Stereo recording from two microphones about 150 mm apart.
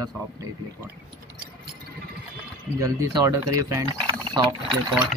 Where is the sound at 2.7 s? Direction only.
20° right (ahead or behind).